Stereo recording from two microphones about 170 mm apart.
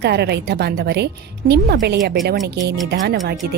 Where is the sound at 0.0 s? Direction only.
75° right (ahead or behind).